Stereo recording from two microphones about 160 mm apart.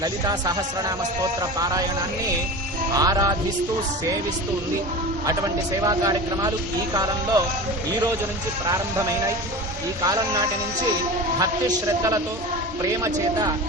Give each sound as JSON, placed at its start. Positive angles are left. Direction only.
{"t": 0.0, "sound": "speech", "side_deg": -25}
{"t": 2.9, "sound": "speech", "side_deg": -25}
{"t": 5.2, "sound": "speech", "side_deg": -20}
{"t": 8.6, "sound": "speech", "side_deg": -20}
{"t": 11.9, "sound": "speech", "side_deg": -20}